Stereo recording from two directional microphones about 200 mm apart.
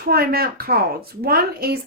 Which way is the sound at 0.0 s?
50° right (ahead or behind).